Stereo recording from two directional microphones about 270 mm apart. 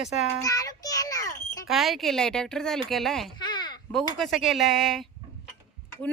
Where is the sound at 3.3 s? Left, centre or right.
Centre.